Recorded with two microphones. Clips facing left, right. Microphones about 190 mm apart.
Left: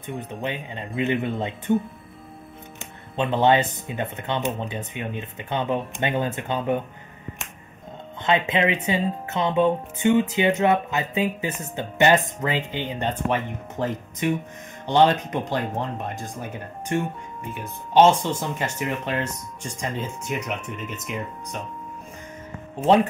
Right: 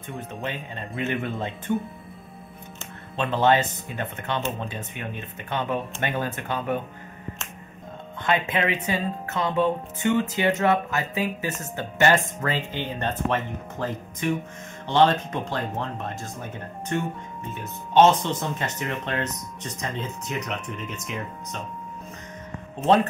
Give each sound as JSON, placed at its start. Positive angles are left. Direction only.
{"t": 0.4, "sound": "speech", "side_deg": 20}
{"t": 3.2, "sound": "speech", "side_deg": 20}
{"t": 8.2, "sound": "speech", "side_deg": 20}
{"t": 17.5, "sound": "speech", "side_deg": 10}
{"t": 22.8, "sound": "speech", "side_deg": 15}